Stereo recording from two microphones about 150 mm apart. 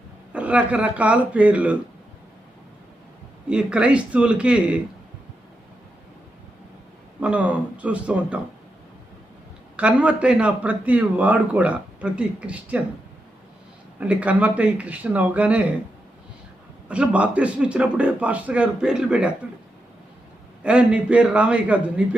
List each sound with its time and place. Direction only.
0.3 s a man's voice: 10° right (ahead or behind)
3.5 s a man's voice: 10° right (ahead or behind)
7.2 s a man's voice: 10° right (ahead or behind)
9.7 s a man's voice: 10° right (ahead or behind)
14.0 s a man's voice: 10° right (ahead or behind)
16.9 s a man's voice: 10° right (ahead or behind)
20.7 s a man's voice: 10° right (ahead or behind)